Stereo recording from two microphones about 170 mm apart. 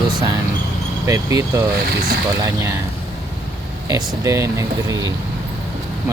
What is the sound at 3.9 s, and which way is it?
Speech, 15° right (ahead or behind).